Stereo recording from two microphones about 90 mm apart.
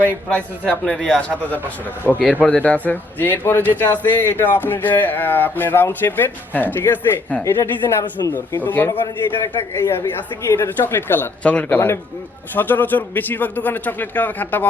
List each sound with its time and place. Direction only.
0.0 s a man's voice: 15° left (ahead or behind)
7.4 s speech: 30° left (ahead or behind)
9.7 s speech: 35° left (ahead or behind)